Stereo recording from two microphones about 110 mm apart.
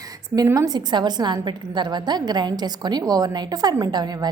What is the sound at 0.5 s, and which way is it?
A woman's voice, 35° right (ahead or behind).